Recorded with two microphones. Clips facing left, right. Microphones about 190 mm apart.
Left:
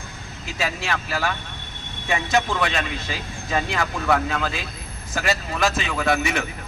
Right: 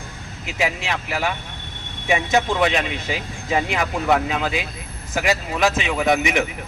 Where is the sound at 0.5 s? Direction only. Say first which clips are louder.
Right 3 dB; 20° right (ahead or behind).